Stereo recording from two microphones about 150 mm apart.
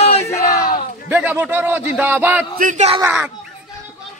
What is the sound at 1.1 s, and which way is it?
Speech, 10° right (ahead or behind).